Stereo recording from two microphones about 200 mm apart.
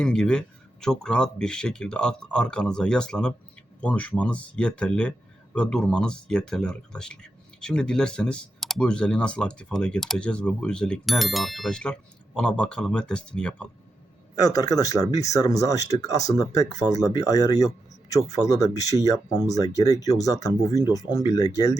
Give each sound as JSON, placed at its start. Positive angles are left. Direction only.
{"t": 0.0, "sound": "speech", "side_deg": 5}
{"t": 14.3, "sound": "speech", "side_deg": 20}